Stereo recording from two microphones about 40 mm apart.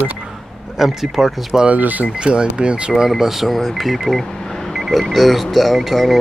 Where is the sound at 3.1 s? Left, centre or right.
Centre.